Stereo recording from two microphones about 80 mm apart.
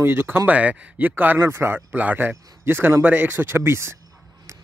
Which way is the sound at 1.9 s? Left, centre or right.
Centre.